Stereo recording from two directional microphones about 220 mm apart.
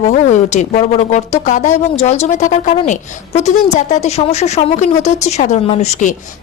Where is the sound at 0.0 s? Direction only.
35° left (ahead or behind).